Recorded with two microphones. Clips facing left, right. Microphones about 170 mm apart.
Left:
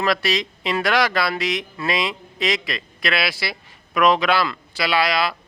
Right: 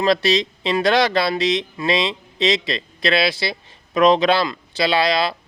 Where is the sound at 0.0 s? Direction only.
25° right (ahead or behind).